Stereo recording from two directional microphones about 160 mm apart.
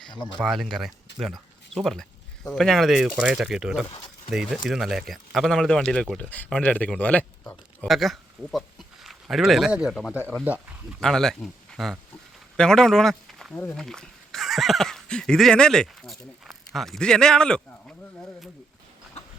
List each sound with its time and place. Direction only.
0.1 s speech: 30° left (ahead or behind)
0.3 s a man's voice: centre (ahead or behind)
11.0 s speech: 5° left (ahead or behind)